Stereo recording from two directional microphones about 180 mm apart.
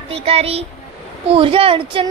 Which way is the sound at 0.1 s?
35° right (ahead or behind).